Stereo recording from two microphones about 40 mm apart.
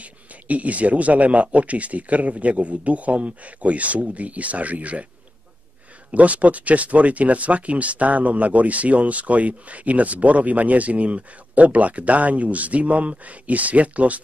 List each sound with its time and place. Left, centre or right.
0.0 s speech: right
6.1 s speech: right